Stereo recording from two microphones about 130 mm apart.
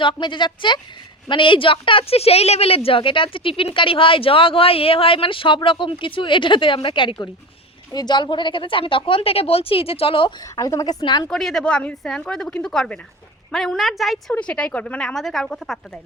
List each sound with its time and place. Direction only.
0.0 s speech: 40° left (ahead or behind)
10.4 s a woman's voice: 25° left (ahead or behind)
11.3 s speech: 5° left (ahead or behind)